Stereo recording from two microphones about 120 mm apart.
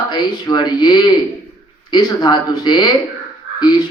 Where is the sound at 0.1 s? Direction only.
35° left (ahead or behind).